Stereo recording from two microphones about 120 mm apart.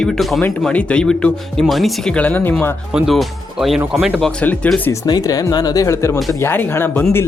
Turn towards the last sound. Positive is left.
turn(degrees=20)  # may be behind; listen again after turning